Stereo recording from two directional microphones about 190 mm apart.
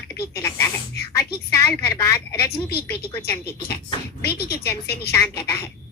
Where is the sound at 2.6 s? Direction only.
55° left (ahead or behind).